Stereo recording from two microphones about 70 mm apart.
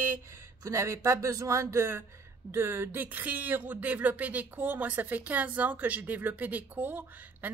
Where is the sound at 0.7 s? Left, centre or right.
Right.